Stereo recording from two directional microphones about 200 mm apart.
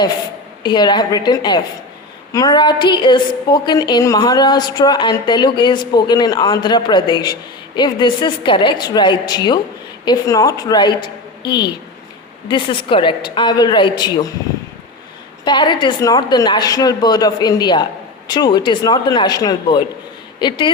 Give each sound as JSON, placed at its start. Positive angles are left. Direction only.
{"t": 0.6, "sound": "a woman's voice", "side_deg": 20}
{"t": 15.4, "sound": "a woman's voice", "side_deg": 25}